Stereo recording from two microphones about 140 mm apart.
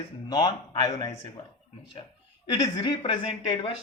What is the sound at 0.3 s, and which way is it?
Speech, 30° left (ahead or behind).